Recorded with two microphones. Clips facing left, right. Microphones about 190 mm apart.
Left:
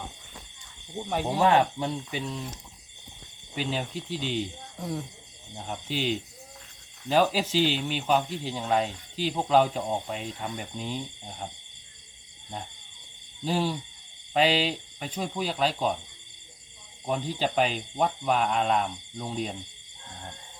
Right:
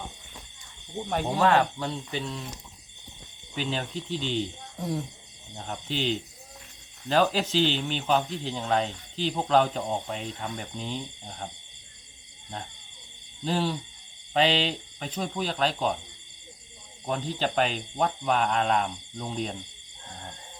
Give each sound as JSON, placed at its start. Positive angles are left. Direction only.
{"t": 1.1, "sound": "speech", "side_deg": 5}
{"t": 1.5, "sound": "speech", "side_deg": 15}
{"t": 3.5, "sound": "speech", "side_deg": 10}
{"t": 4.8, "sound": "speech", "side_deg": -5}
{"t": 13.4, "sound": "speech", "side_deg": 10}
{"t": 17.1, "sound": "speech", "side_deg": 10}